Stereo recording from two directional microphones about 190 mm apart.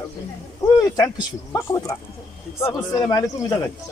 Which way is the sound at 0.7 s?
15° left (ahead or behind).